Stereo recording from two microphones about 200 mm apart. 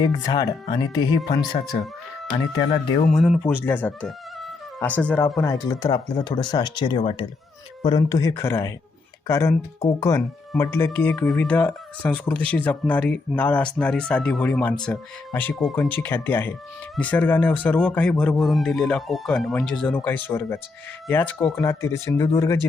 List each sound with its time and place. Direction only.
0.0 s speech: 20° left (ahead or behind)
2.8 s speech: 25° left (ahead or behind)
3.1 s speech: centre (ahead or behind)
5.4 s speech: 20° left (ahead or behind)